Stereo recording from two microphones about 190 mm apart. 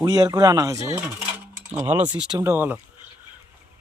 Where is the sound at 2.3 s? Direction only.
15° right (ahead or behind).